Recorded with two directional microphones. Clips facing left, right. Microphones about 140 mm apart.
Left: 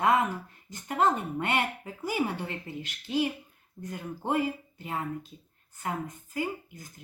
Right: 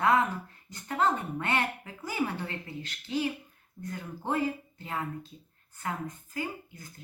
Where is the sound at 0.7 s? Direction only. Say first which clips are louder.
Left 2 dB; 15° left (ahead or behind).